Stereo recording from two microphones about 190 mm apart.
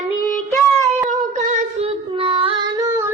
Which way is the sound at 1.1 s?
40° right (ahead or behind).